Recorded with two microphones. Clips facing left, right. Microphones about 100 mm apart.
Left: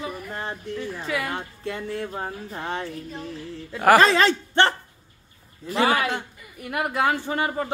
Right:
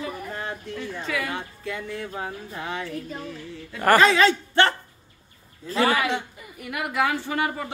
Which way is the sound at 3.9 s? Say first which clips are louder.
Right 1 dB; 35° left (ahead or behind).